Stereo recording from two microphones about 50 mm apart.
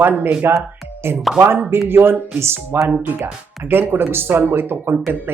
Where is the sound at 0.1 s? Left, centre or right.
Right.